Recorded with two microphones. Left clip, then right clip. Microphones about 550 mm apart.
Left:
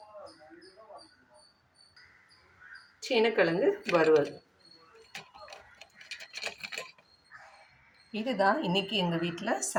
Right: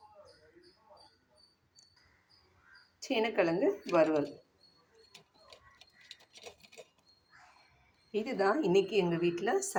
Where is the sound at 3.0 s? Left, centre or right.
Right.